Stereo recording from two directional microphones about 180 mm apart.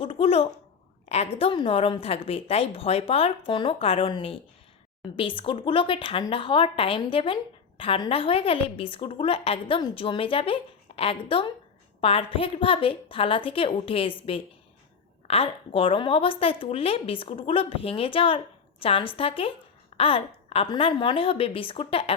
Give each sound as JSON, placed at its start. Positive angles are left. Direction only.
{"t": 0.0, "sound": "a sound", "side_deg": 30}
{"t": 1.0, "sound": "a woman's voice", "side_deg": 35}
{"t": 15.3, "sound": "a woman's voice", "side_deg": 30}